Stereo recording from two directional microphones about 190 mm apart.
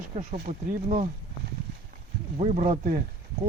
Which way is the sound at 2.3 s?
30° right (ahead or behind).